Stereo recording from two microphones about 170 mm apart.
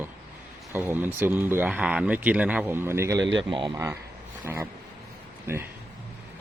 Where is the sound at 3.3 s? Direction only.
30° right (ahead or behind).